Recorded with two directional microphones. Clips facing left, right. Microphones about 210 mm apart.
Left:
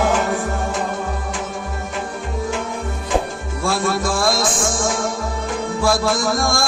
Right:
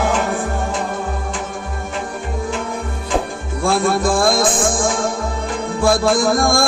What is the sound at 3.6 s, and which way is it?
Music, 55° right (ahead or behind).